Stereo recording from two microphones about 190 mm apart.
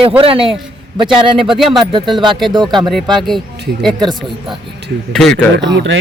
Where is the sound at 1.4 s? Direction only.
Centre (ahead or behind).